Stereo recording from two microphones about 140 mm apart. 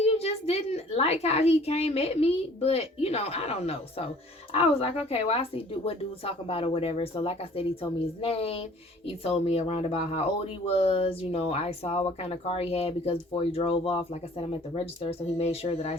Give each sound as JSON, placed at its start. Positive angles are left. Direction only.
{"t": 0.0, "sound": "a woman's voice", "side_deg": 45}